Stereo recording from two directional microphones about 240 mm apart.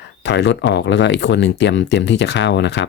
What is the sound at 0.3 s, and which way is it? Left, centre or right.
Speech, left.